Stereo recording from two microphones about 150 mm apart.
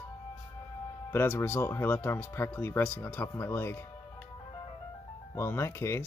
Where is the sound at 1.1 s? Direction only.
15° left (ahead or behind).